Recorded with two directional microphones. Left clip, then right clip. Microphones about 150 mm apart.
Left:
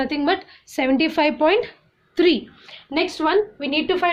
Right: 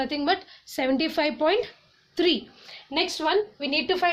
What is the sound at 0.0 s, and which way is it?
A woman's voice, 25° right (ahead or behind).